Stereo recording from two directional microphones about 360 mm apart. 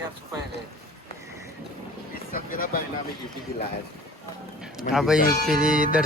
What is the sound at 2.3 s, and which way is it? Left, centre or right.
Speech, left.